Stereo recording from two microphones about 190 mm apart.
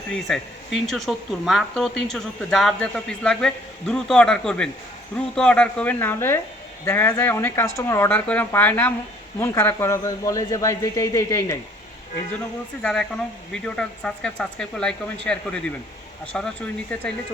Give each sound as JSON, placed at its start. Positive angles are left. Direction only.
{"t": 0.1, "sound": "speech", "side_deg": 0}
{"t": 12.8, "sound": "speech", "side_deg": 5}